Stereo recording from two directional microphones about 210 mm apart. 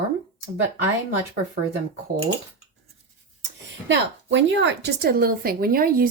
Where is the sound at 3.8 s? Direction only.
60° right (ahead or behind).